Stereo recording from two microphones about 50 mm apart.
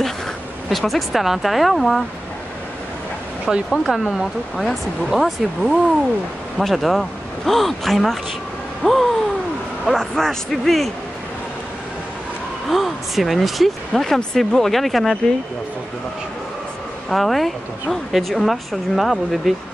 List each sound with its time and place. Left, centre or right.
0.7 s speech: centre
3.7 s speech: centre
12.6 s speech: centre
17.1 s speech: centre